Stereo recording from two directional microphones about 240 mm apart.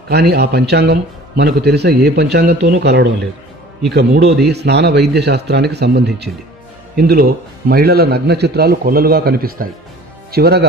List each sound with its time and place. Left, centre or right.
0.1 s a man's voice: right